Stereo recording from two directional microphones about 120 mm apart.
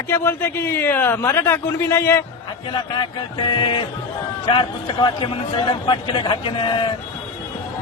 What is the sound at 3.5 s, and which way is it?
A man's voice, 45° left (ahead or behind).